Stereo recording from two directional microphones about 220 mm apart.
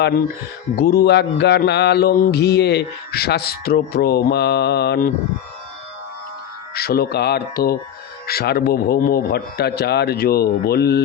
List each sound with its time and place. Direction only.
0.8 s mantra: 45° left (ahead or behind)
6.7 s mantra: 45° left (ahead or behind)